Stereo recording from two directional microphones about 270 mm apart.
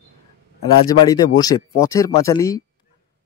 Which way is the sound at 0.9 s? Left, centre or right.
Centre.